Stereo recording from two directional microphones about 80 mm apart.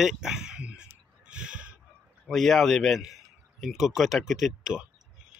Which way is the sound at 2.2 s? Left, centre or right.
Centre.